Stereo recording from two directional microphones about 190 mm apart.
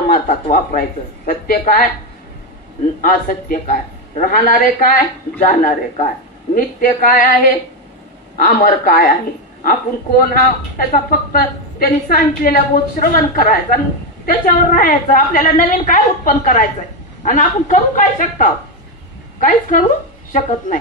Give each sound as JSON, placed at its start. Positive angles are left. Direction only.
{"t": 0.1, "sound": "a woman's voice", "side_deg": 50}
{"t": 3.0, "sound": "a woman's voice", "side_deg": 45}
{"t": 19.7, "sound": "a woman's voice", "side_deg": 45}